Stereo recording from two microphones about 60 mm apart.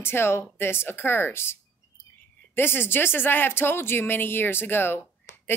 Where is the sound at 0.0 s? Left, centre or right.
Left.